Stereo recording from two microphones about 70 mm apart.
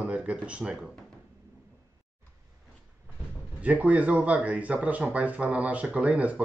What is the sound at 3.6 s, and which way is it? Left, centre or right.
Speech, right.